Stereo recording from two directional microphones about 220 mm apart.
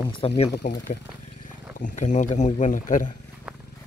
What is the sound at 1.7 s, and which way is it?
Speech, 35° left (ahead or behind).